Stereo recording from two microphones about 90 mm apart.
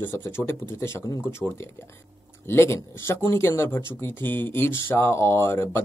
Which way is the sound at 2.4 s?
30° left (ahead or behind).